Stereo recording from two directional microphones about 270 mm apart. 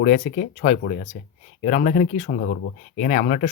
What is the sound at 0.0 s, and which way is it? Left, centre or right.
Speech, left.